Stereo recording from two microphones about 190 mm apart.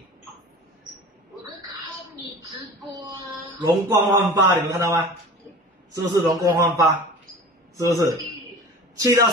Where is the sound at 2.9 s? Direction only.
20° right (ahead or behind).